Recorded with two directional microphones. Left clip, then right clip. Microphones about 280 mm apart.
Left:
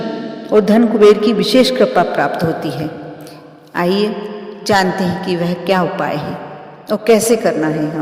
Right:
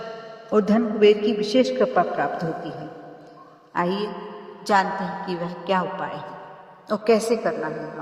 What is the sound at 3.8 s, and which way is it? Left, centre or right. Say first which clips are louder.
A man's voice: left 9 dB; left.